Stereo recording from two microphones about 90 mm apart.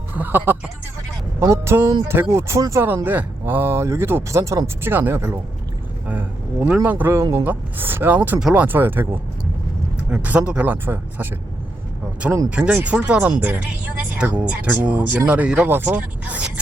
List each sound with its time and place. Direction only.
0.1 s speech: 20° right (ahead or behind)
2.8 s speech: 20° right (ahead or behind)
6.1 s vehicle: 20° right (ahead or behind)
6.8 s speech: 20° right (ahead or behind)
10.1 s speech: 15° right (ahead or behind)
12.5 s speech: 15° right (ahead or behind)